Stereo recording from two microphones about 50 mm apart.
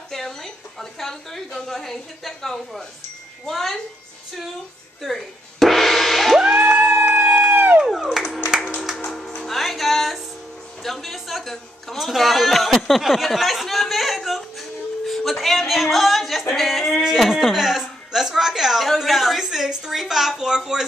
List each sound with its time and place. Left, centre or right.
0.1 s a woman's voice: centre
5.0 s music: centre
6.4 s music: centre
7.5 s a sound: right
7.8 s clapping: centre
8.9 s music: centre
9.4 s music: centre
10.8 s a woman's voice: centre